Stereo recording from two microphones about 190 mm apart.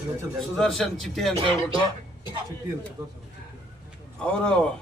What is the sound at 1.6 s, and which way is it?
Speech, 25° right (ahead or behind).